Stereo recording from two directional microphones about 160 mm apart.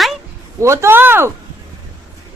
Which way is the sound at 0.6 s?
15° right (ahead or behind).